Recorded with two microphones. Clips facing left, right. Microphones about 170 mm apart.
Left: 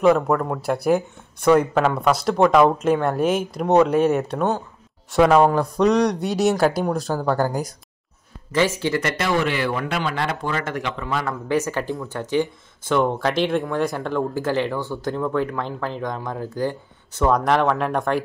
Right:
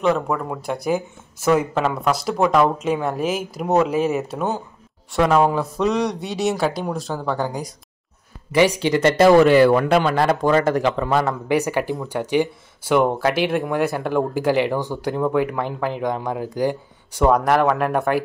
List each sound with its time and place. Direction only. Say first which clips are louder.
0.0 s speech: left 3 dB; centre (ahead or behind)
8.5 s speech: right 4 dB; 15° right (ahead or behind)
9.0 s speech: right 14 dB; 40° right (ahead or behind)
11.4 s speech: right 2 dB; 15° right (ahead or behind)